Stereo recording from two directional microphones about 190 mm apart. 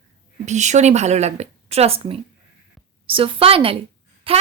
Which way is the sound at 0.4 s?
40° right (ahead or behind).